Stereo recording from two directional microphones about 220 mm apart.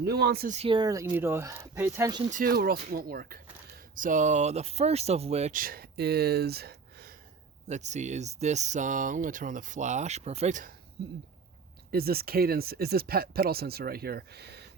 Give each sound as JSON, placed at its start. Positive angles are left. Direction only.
{"t": 0.0, "sound": "speech", "side_deg": -45}
{"t": 0.5, "sound": "speech", "side_deg": -25}
{"t": 2.3, "sound": "speech", "side_deg": -40}
{"t": 7.7, "sound": "speech", "side_deg": -30}
{"t": 11.9, "sound": "speech", "side_deg": -45}